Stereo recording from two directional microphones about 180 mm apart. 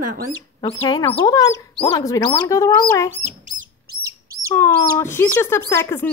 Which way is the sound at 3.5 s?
25° right (ahead or behind).